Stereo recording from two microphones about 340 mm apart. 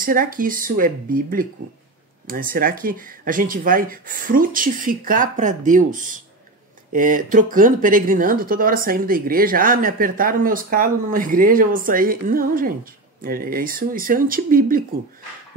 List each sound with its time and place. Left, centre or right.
0.0 s speech: right